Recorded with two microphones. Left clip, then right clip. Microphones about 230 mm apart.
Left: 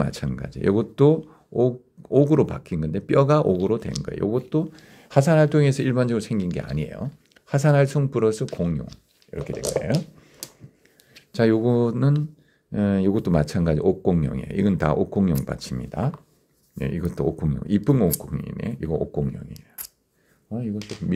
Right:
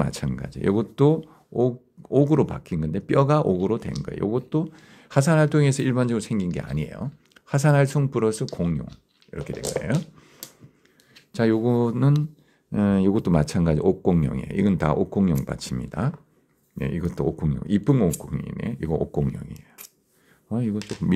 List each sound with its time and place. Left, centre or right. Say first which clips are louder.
0.0 s speech: even; centre
20.4 s speech: right 3 dB; right